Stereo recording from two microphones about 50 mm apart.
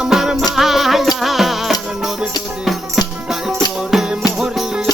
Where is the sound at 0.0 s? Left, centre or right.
Centre.